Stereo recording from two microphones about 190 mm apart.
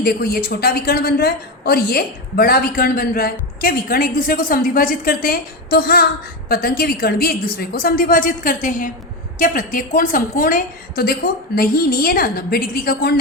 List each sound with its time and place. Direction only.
0.0 s a woman's voice: 55° left (ahead or behind)